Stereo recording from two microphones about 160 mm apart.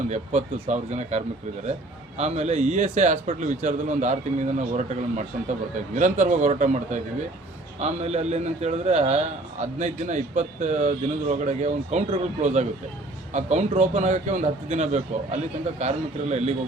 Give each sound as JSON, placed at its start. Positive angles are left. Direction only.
{"t": 0.1, "sound": "a man's voice", "side_deg": -45}